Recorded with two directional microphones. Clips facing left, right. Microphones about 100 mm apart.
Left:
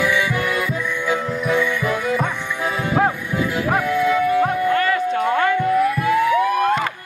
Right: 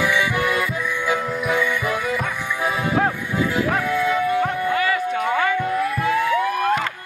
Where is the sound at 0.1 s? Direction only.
20° right (ahead or behind).